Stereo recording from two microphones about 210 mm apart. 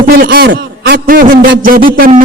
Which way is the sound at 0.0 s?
45° right (ahead or behind).